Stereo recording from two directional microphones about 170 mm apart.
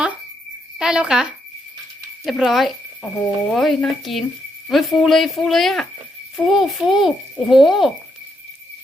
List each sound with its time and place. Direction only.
0.8 s a child's voice: 5° right (ahead or behind)